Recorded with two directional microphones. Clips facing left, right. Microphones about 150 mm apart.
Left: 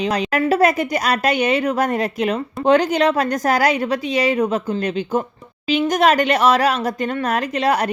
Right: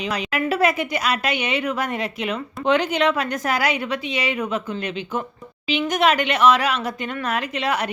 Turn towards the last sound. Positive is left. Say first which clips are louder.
# left 5 dB
turn(degrees=40)  # may be behind; listen again after turning